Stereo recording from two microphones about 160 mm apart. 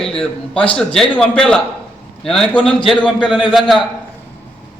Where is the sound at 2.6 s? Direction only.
35° left (ahead or behind).